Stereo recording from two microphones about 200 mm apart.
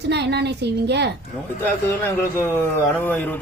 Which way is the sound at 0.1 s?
55° right (ahead or behind).